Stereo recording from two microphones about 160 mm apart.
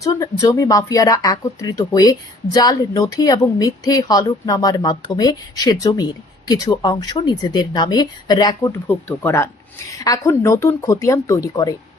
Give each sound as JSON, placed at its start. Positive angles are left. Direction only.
{"t": 0.0, "sound": "speech", "side_deg": 20}
{"t": 8.9, "sound": "speech", "side_deg": 15}